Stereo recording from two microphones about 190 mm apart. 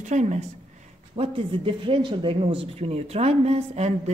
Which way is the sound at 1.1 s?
25° right (ahead or behind).